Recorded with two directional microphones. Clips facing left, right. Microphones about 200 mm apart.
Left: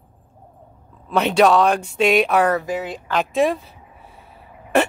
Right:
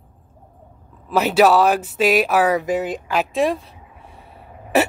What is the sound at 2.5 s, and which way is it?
Speech, 20° right (ahead or behind).